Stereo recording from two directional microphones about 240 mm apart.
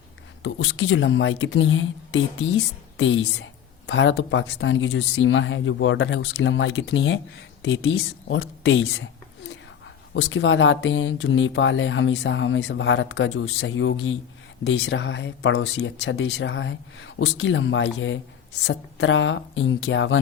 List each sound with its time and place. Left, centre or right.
0.4 s speech: left
10.2 s speech: left